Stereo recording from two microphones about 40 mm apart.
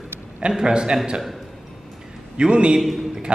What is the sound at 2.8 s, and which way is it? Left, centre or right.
Speech, centre.